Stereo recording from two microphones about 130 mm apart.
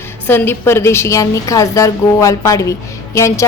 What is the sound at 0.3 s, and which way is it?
A woman's voice, 15° left (ahead or behind).